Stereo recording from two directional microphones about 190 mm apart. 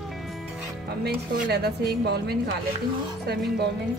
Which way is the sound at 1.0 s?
60° right (ahead or behind).